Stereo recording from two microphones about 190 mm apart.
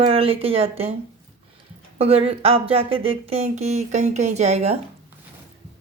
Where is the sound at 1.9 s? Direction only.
30° right (ahead or behind).